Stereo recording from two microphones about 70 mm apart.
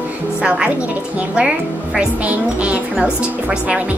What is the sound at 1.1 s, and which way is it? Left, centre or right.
Speech, centre.